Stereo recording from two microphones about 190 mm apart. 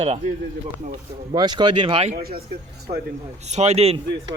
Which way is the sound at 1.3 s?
25° right (ahead or behind).